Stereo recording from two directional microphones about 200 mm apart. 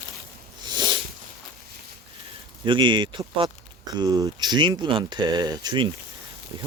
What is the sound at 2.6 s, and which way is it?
Speech, 25° right (ahead or behind).